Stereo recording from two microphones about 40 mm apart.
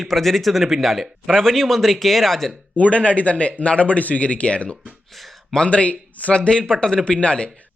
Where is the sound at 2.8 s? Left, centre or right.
Left.